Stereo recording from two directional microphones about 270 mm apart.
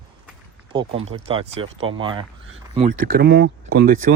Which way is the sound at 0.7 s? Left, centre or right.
Right.